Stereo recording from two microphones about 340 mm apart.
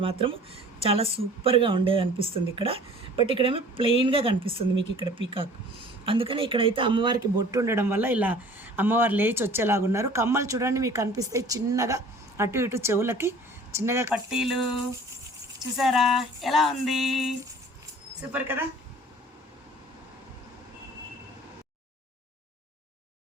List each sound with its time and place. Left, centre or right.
0.0 s speech: centre
13.7 s music: centre
15.8 s music: centre